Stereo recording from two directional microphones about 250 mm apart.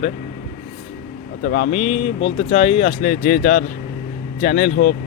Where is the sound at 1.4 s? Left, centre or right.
Left.